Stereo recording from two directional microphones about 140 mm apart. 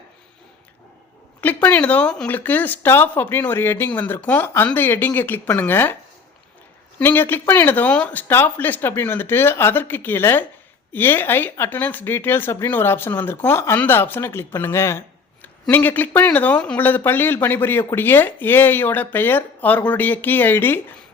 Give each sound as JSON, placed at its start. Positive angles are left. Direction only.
{"t": 1.4, "sound": "speech", "side_deg": 15}
{"t": 7.0, "sound": "speech", "side_deg": 15}